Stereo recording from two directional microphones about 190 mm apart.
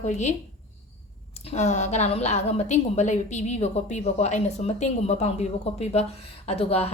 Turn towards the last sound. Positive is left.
turn(degrees=30)  # may be behind; listen again after turning